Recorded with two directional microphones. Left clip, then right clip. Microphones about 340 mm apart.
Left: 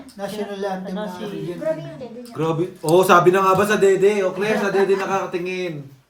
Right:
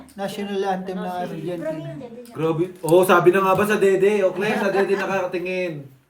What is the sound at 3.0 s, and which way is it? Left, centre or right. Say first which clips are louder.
A man's voice: left 2 dB; centre.